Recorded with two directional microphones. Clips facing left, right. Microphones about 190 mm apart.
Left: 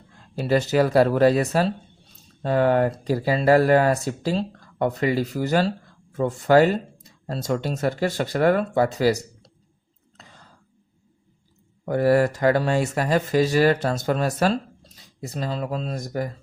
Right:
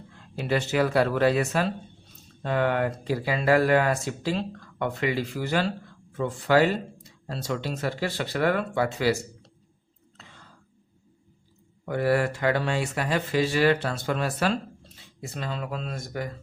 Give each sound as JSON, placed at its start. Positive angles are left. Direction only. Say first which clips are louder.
{"t": 0.3, "sound": "speech", "louder": "left 5 dB", "side_deg": 40}
{"t": 10.2, "sound": "whispering", "louder": "left 2 dB", "side_deg": 40}
{"t": 11.9, "sound": "speech", "louder": "left 5 dB", "side_deg": 40}